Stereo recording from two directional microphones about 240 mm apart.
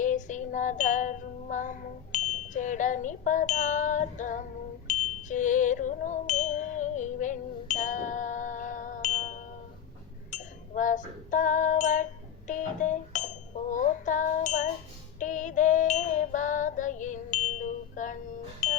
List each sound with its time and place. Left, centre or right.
0.0 s wind chime: left
4.9 s music: left
10.3 s chink: left
11.3 s female singing: left
12.5 s tuning fork: left
15.2 s female singing: left